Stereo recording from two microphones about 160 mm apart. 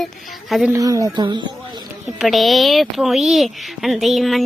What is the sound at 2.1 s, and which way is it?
A woman's voice, centre (ahead or behind).